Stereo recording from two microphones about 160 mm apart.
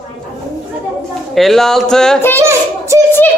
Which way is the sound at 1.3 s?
Centre (ahead or behind).